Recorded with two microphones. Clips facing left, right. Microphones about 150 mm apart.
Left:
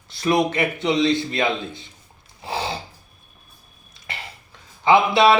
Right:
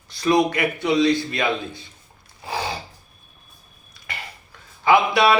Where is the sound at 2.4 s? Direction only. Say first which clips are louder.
Left 1 dB; 25° left (ahead or behind).